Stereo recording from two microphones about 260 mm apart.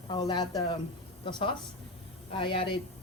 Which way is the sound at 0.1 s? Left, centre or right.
Centre.